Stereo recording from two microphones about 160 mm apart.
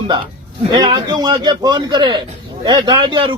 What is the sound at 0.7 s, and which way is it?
A man's voice, 30° right (ahead or behind).